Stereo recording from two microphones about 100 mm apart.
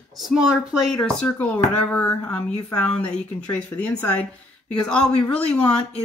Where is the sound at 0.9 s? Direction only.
10° left (ahead or behind).